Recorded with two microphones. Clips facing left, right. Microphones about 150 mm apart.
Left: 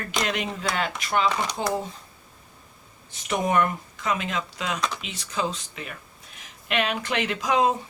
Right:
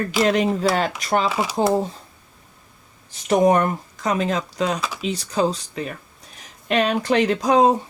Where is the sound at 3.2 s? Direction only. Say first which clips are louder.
Right 7 dB; 35° right (ahead or behind).